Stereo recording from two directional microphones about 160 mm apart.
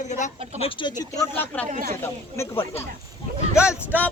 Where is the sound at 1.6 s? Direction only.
50° right (ahead or behind).